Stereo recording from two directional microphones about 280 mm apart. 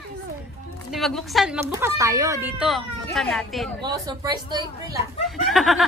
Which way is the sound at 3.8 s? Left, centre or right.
Centre.